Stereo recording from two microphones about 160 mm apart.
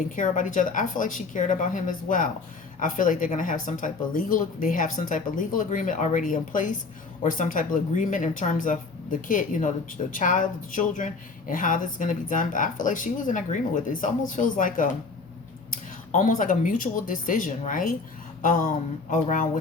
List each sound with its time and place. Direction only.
0.2 s speech: 55° left (ahead or behind)
19.1 s speech: 55° left (ahead or behind)